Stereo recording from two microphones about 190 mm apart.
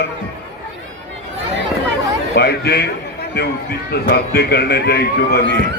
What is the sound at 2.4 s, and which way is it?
Speech, 55° left (ahead or behind).